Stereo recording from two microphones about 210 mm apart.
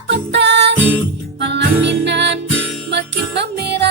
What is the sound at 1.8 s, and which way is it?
Music, 55° right (ahead or behind).